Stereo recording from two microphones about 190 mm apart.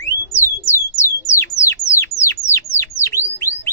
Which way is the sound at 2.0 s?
15° left (ahead or behind).